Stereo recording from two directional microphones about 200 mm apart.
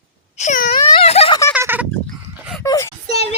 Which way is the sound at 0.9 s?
30° left (ahead or behind).